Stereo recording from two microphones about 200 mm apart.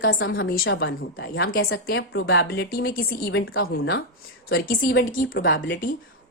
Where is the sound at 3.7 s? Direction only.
55° left (ahead or behind).